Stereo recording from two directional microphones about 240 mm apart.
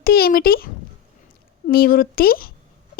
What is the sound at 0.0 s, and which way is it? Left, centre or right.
Speech, left.